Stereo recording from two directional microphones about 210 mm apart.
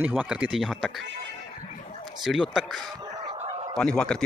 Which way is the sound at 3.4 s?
25° right (ahead or behind).